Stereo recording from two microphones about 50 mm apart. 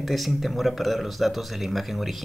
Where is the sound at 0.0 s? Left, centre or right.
Centre.